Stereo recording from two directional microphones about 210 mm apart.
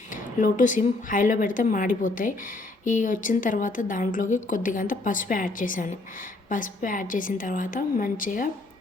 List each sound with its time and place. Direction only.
0.1 s a woman's voice: 40° left (ahead or behind)